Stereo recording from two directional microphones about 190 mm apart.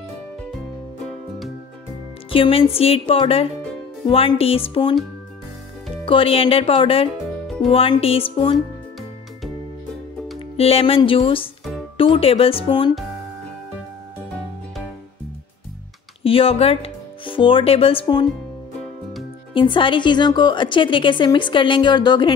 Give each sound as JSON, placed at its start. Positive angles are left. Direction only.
{"t": 2.3, "sound": "a woman's voice", "side_deg": 30}
{"t": 6.0, "sound": "a woman's voice", "side_deg": 30}
{"t": 10.5, "sound": "a woman's voice", "side_deg": 30}
{"t": 16.3, "sound": "speech", "side_deg": 30}
{"t": 19.5, "sound": "a woman's voice", "side_deg": 25}